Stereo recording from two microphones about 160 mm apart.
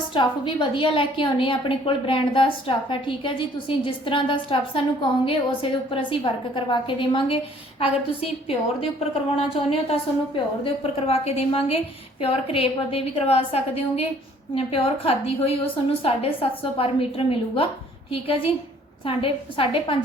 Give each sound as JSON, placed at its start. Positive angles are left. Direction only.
{"t": 0.1, "sound": "a woman's voice", "side_deg": 30}